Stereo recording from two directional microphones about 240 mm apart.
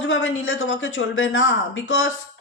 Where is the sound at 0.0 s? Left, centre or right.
Left.